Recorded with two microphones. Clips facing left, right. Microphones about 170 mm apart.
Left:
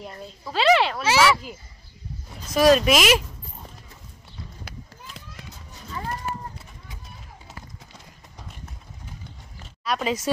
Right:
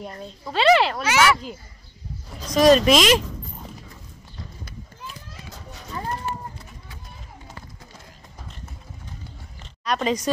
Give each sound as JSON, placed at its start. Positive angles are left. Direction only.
{"t": 0.0, "sound": "speech", "side_deg": 0}
{"t": 1.0, "sound": "speech", "side_deg": 30}
{"t": 2.5, "sound": "speech", "side_deg": 5}
{"t": 9.6, "sound": "a sound", "side_deg": 5}